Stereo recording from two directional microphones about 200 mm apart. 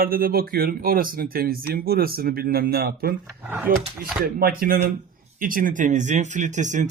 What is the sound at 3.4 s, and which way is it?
Speech, 10° right (ahead or behind).